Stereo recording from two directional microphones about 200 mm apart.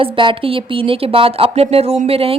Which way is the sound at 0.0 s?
25° right (ahead or behind).